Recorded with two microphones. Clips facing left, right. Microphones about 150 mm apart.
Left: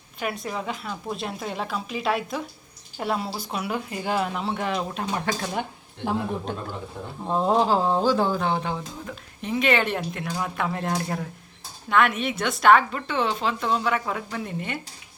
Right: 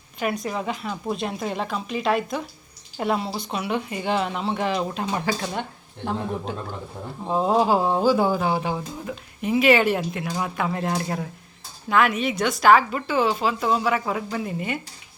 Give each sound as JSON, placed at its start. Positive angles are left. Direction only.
{"t": 0.2, "sound": "speech", "side_deg": 0}